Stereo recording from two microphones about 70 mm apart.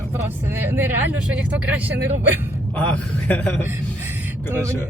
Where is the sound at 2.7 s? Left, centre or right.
Left.